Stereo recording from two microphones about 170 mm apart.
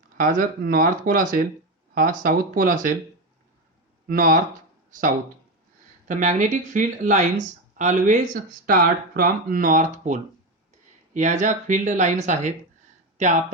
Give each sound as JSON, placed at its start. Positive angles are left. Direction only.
{"t": 0.2, "sound": "speech", "side_deg": -50}
{"t": 4.1, "sound": "speech", "side_deg": -55}